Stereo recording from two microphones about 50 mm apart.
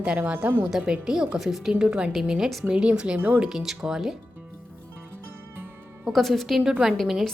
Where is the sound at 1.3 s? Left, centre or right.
Centre.